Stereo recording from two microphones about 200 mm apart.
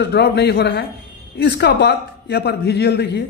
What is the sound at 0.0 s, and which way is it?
Speech, 55° left (ahead or behind).